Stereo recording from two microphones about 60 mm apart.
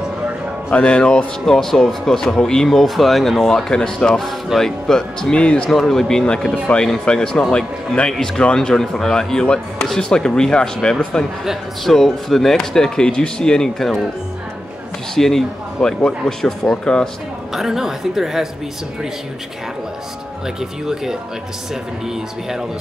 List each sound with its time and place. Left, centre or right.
0.7 s speech: centre
5.8 s speech: centre
15.1 s speech: centre
17.6 s a woman's voice: centre
20.8 s a woman's voice: centre